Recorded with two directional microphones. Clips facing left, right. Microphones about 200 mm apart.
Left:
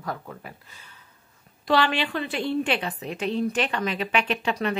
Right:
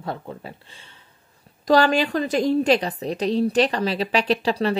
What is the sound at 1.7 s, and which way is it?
A woman's voice, 45° right (ahead or behind).